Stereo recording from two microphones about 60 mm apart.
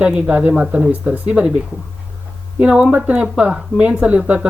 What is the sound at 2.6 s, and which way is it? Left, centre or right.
Speech, right.